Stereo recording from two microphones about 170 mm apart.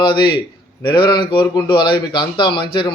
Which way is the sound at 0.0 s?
30° left (ahead or behind).